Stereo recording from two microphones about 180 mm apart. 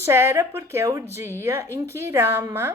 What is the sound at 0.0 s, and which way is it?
Speech, 15° right (ahead or behind).